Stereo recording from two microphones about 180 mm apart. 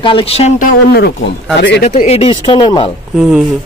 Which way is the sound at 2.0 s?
35° left (ahead or behind).